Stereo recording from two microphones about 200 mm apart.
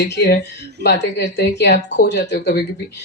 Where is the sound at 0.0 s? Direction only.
55° left (ahead or behind).